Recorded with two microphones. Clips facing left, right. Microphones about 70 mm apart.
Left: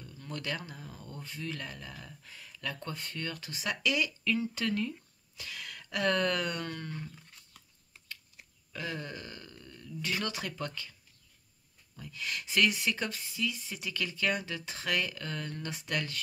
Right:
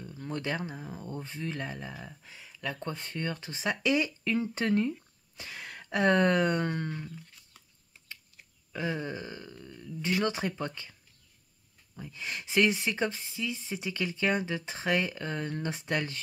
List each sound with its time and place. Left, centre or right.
0.0 s speech: right
8.7 s burping: right
10.0 s speech: right
12.0 s speech: right